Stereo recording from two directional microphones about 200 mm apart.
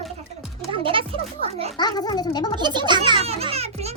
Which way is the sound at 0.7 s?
25° right (ahead or behind).